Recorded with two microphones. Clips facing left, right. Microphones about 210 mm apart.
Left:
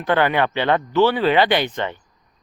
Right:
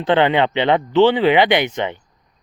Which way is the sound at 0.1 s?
20° right (ahead or behind).